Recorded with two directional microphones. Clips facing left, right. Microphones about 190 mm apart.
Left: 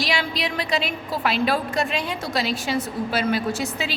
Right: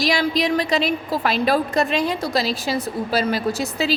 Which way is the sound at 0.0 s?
40° right (ahead or behind).